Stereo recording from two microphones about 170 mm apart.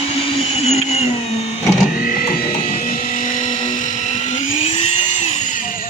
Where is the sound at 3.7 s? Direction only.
45° left (ahead or behind).